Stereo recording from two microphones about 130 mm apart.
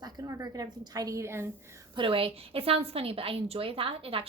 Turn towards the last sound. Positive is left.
turn(degrees=-45)  # may be behind; listen again after turning